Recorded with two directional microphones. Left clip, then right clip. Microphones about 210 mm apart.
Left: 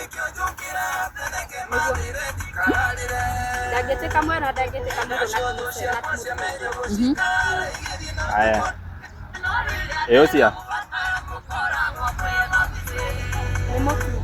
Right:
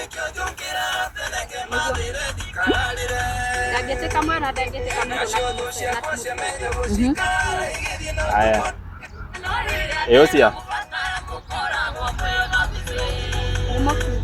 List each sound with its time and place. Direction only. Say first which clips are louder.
0.2 s music: left 1 dB; 30° right (ahead or behind)
3.7 s music: even; centre (ahead or behind)
4.3 s speech: even; centre (ahead or behind)
4.9 s music: right 1 dB; 35° right (ahead or behind)
7.2 s speech: left 2 dB; 35° right (ahead or behind)
9.4 s music: even; 35° right (ahead or behind)